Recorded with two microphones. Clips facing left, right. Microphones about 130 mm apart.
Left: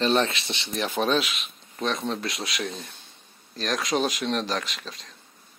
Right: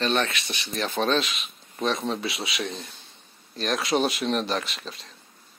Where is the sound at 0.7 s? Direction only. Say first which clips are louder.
Even; 10° left (ahead or behind).